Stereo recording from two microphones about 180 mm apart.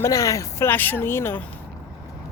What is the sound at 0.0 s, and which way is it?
Speech, 15° left (ahead or behind).